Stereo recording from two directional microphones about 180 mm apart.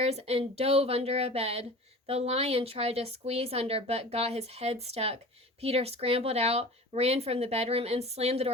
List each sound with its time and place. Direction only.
0.0 s speech: 35° right (ahead or behind)